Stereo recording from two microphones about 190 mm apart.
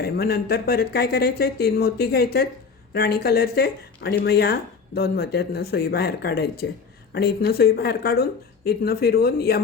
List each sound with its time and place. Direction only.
0.0 s speech: 55° left (ahead or behind)